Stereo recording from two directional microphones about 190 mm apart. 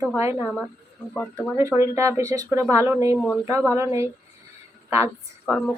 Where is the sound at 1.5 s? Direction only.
15° right (ahead or behind).